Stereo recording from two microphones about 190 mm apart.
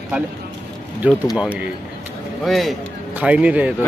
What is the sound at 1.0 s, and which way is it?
Speech, 10° right (ahead or behind).